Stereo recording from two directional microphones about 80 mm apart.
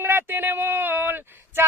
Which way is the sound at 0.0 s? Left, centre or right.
Right.